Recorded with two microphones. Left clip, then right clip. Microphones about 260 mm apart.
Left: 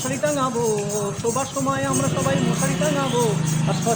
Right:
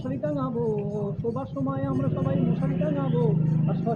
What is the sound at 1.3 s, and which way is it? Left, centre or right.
Speech, centre.